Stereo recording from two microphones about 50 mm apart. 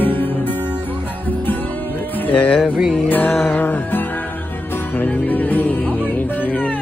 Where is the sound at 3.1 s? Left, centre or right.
Left.